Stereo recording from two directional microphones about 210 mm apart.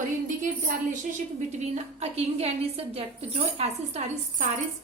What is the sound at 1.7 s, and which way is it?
A woman's voice, 30° right (ahead or behind).